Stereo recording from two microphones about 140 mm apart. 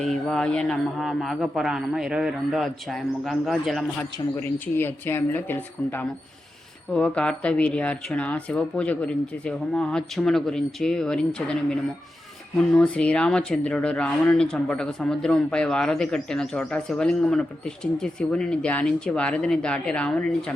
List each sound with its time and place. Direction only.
0.0 s speech: centre (ahead or behind)
4.4 s speech: 15° left (ahead or behind)